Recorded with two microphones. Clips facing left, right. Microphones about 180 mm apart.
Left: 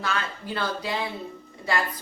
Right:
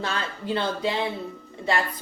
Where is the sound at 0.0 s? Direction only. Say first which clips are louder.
Even; 25° right (ahead or behind).